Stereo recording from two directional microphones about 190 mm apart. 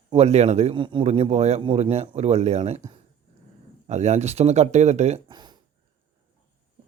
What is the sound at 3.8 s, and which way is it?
A man's voice, 35° right (ahead or behind).